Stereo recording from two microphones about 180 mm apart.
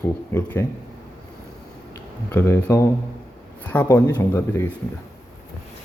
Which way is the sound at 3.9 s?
10° left (ahead or behind).